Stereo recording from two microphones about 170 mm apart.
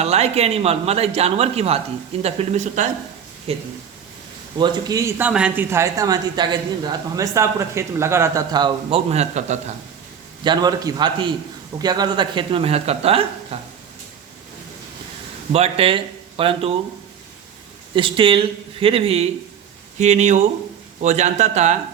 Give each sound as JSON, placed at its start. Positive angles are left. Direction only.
{"t": 0.0, "sound": "speech", "side_deg": -40}
{"t": 4.6, "sound": "speech", "side_deg": -20}
{"t": 9.0, "sound": "speech", "side_deg": -40}
{"t": 10.4, "sound": "a man's voice", "side_deg": -25}
{"t": 15.5, "sound": "speech", "side_deg": -35}
{"t": 17.9, "sound": "speech", "side_deg": -30}